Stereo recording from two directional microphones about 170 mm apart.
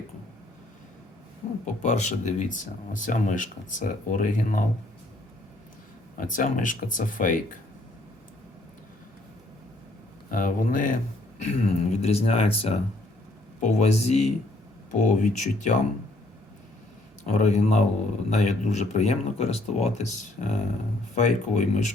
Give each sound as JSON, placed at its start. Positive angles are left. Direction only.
{"t": 1.6, "sound": "speech", "side_deg": 45}
{"t": 6.1, "sound": "speech", "side_deg": 50}
{"t": 10.3, "sound": "speech", "side_deg": 50}
{"t": 14.8, "sound": "speech", "side_deg": 50}
{"t": 17.2, "sound": "speech", "side_deg": 45}